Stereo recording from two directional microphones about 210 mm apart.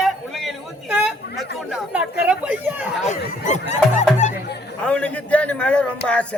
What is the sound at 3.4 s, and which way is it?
Speech, 35° left (ahead or behind).